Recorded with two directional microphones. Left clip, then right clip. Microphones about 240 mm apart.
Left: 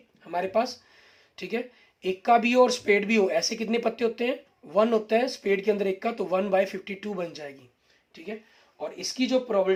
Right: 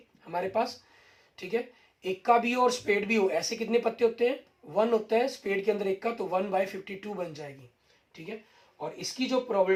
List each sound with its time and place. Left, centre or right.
0.3 s speech: left
8.8 s speech: left